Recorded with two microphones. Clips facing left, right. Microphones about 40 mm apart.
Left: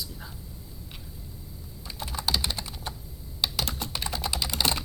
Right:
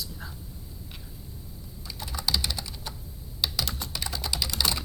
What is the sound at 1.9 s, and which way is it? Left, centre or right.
Typing, left.